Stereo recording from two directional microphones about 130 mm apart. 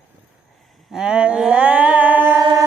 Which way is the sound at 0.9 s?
5° right (ahead or behind).